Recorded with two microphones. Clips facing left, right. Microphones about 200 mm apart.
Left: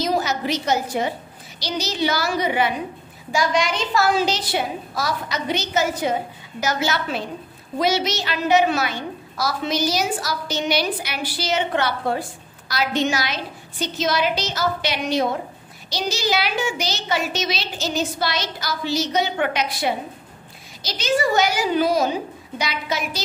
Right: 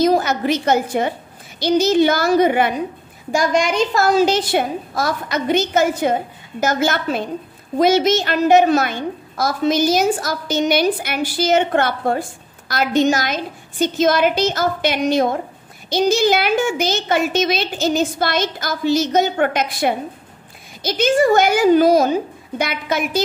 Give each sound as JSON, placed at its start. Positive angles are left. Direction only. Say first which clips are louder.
{"t": 0.0, "sound": "a woman's voice", "louder": "right 6 dB", "side_deg": -55}